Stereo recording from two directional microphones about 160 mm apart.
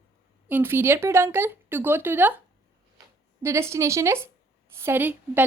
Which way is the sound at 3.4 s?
15° right (ahead or behind).